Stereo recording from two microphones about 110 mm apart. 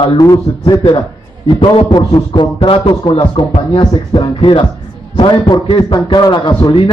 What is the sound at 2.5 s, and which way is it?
A man's voice, 55° left (ahead or behind).